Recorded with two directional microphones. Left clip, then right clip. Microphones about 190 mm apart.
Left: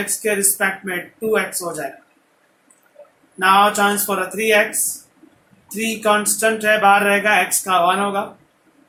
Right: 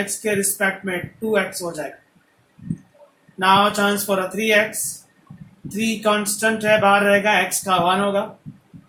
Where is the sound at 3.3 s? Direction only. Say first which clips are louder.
Left 2 dB; 35° right (ahead or behind).